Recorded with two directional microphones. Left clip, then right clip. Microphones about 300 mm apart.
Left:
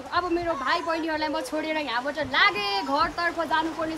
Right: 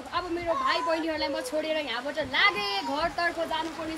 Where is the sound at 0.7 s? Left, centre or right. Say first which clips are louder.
Left 1 dB; centre.